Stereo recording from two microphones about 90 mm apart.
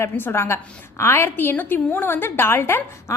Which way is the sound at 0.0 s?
25° left (ahead or behind).